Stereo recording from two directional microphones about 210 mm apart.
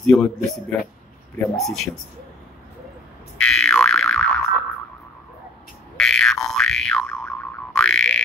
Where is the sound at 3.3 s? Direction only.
5° left (ahead or behind).